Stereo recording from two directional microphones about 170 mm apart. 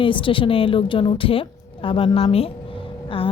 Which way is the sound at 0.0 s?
30° left (ahead or behind).